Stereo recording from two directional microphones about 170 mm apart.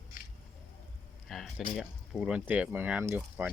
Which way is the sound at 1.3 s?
Centre (ahead or behind).